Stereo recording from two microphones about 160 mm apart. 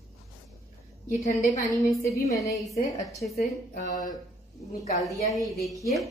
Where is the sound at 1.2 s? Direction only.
55° left (ahead or behind).